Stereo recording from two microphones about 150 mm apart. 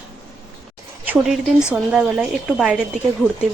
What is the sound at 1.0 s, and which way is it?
Speech, 5° right (ahead or behind).